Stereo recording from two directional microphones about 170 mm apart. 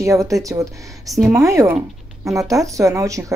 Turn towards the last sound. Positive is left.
turn(degrees=-20)  # may be behind; listen again after turning